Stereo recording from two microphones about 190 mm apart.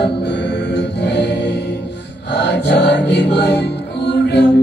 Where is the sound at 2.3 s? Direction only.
65° left (ahead or behind).